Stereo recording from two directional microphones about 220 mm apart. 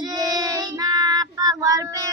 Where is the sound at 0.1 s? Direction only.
15° right (ahead or behind).